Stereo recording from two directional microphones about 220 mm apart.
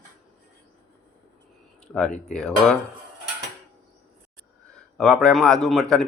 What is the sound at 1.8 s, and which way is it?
Speech, 5° left (ahead or behind).